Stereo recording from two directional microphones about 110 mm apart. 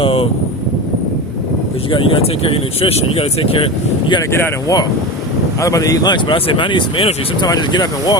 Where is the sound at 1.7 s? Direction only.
55° left (ahead or behind).